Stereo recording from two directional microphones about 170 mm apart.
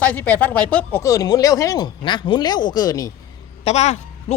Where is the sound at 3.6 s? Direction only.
40° left (ahead or behind).